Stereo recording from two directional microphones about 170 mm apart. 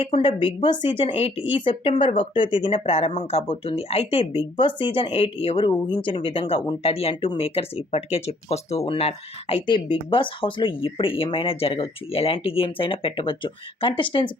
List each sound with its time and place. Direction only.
0.0 s a woman's voice: 30° left (ahead or behind)